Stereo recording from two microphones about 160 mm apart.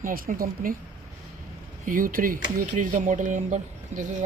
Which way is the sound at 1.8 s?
60° right (ahead or behind).